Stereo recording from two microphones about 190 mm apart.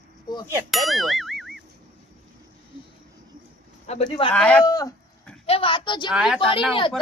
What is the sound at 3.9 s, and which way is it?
Speech, 35° left (ahead or behind).